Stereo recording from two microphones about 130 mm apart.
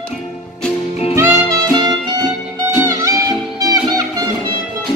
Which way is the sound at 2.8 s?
25° right (ahead or behind).